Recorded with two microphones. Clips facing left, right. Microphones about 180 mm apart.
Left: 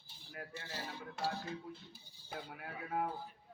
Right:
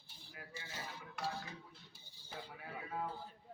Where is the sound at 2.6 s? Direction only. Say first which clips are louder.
Left 5 dB; 70° left (ahead or behind).